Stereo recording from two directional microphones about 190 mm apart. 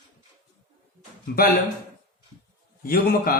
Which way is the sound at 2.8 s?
50° left (ahead or behind).